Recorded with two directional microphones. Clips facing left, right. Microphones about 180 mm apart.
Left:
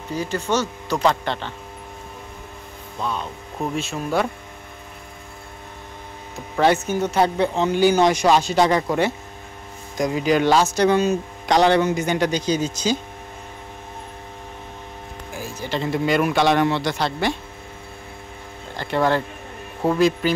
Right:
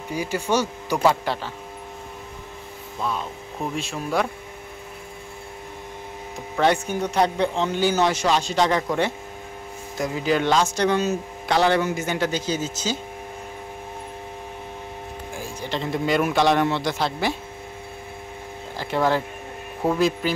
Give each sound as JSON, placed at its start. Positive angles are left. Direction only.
{"t": 0.1, "sound": "speech", "side_deg": -10}
{"t": 3.0, "sound": "a man's voice", "side_deg": 0}
{"t": 6.6, "sound": "a man's voice", "side_deg": 5}
{"t": 15.7, "sound": "a man's voice", "side_deg": 0}
{"t": 18.8, "sound": "a man's voice", "side_deg": -5}